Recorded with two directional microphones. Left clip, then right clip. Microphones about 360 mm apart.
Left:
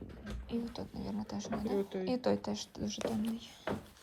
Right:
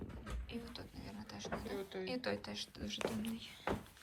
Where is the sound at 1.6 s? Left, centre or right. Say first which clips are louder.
Left 8 dB; left.